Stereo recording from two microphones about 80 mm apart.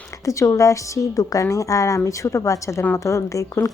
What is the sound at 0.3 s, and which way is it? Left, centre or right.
A woman's voice, left.